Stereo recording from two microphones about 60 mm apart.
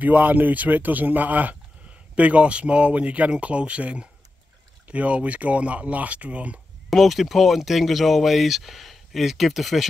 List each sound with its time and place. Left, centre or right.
0.0 s speech: right
6.9 s speech: centre